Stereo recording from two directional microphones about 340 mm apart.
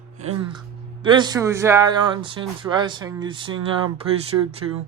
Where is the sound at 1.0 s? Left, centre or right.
Centre.